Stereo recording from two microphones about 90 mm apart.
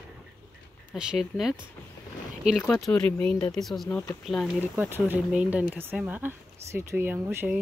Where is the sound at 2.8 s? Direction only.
10° left (ahead or behind).